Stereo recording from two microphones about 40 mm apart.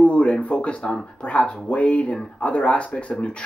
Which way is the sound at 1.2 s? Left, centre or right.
Left.